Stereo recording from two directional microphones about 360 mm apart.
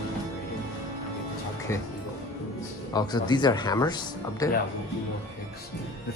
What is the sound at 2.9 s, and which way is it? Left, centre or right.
Speech, centre.